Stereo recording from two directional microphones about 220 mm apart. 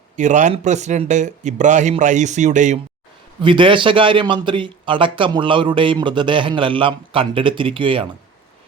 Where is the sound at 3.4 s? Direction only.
20° right (ahead or behind).